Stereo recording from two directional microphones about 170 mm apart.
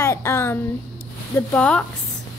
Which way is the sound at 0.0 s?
15° left (ahead or behind).